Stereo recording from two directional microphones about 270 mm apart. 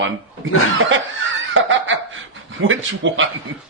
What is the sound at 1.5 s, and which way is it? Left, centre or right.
Laughter, right.